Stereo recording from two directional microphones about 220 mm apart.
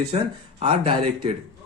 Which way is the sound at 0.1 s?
30° right (ahead or behind).